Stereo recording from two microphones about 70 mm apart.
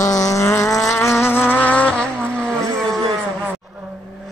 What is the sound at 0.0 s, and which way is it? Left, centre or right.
Vehicle, left.